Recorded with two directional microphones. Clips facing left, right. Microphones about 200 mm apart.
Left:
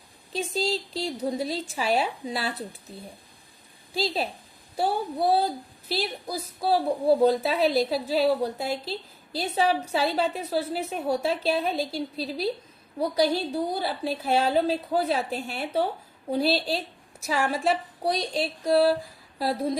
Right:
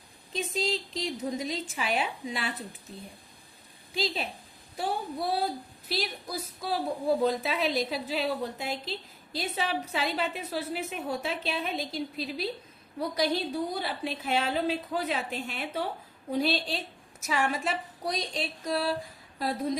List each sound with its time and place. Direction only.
0.5 s a woman's voice: 35° left (ahead or behind)
3.9 s a woman's voice: 40° left (ahead or behind)